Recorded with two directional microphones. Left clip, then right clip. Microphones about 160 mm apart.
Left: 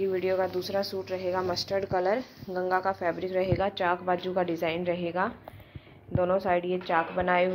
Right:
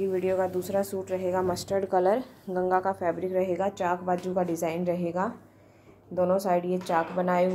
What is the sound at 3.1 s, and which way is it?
Speech, 10° right (ahead or behind).